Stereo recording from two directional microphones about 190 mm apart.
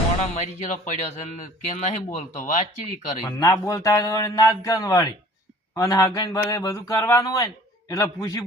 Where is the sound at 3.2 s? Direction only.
20° left (ahead or behind).